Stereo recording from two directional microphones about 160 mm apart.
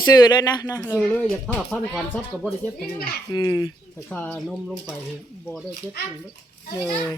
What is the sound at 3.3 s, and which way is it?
Speech, 25° left (ahead or behind).